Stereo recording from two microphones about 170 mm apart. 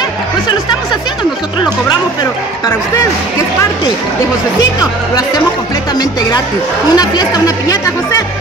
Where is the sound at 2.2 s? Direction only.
20° left (ahead or behind).